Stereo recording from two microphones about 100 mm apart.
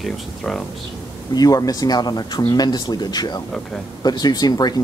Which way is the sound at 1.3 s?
40° left (ahead or behind).